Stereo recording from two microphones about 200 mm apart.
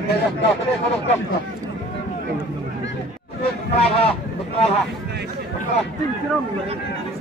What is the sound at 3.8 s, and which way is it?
Speech, 30° left (ahead or behind).